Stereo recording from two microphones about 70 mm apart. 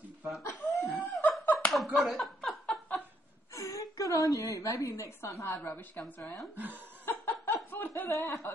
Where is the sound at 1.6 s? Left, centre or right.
Centre.